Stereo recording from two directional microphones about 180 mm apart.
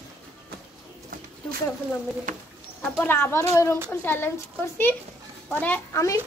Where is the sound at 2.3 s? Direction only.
45° right (ahead or behind).